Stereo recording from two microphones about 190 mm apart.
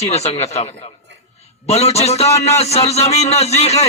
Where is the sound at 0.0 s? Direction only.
35° left (ahead or behind).